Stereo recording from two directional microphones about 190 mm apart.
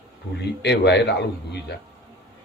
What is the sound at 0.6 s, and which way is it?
Speech, 60° left (ahead or behind).